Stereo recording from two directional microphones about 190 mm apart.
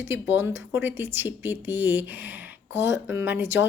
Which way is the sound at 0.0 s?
10° right (ahead or behind).